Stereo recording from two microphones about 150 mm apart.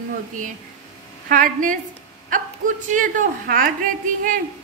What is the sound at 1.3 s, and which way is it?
Speech, 60° right (ahead or behind).